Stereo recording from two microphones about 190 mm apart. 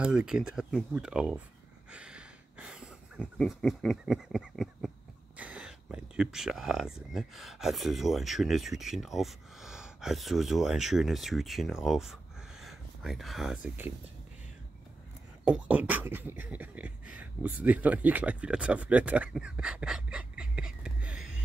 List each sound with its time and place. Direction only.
0.0 s speech: 5° right (ahead or behind)
1.9 s a sound: 5° right (ahead or behind)
5.4 s speech: 5° right (ahead or behind)
15.4 s beatboxing: 5° right (ahead or behind)